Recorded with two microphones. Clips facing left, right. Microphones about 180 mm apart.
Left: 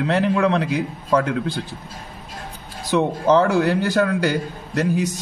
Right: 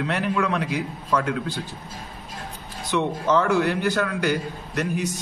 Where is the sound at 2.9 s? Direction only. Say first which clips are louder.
Left 5 dB; 35° left (ahead or behind).